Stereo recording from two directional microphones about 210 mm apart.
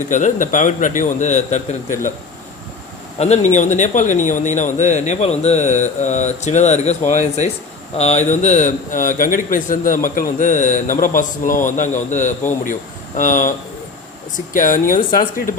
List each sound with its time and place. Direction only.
0.1 s speech: 35° left (ahead or behind)
3.2 s speech: 35° left (ahead or behind)
14.5 s speech: 40° left (ahead or behind)